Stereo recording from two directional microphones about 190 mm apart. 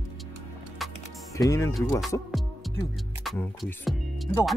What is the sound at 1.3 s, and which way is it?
Speech, 15° left (ahead or behind).